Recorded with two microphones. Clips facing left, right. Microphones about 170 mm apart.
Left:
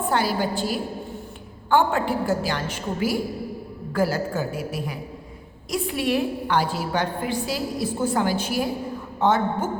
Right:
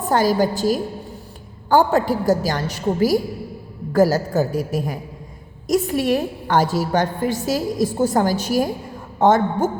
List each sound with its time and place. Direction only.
0.1 s a woman's voice: 40° right (ahead or behind)